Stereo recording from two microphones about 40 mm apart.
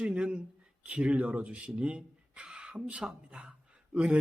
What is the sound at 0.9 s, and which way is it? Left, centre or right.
Speech, right.